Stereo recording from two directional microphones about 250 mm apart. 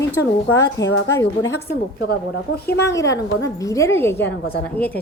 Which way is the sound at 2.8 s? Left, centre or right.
Centre.